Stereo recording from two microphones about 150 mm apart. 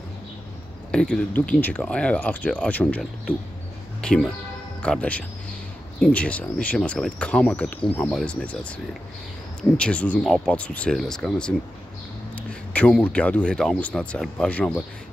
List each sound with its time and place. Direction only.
0.9 s speech: 5° left (ahead or behind)